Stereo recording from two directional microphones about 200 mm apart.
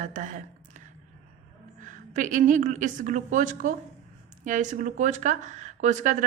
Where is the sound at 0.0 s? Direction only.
40° right (ahead or behind).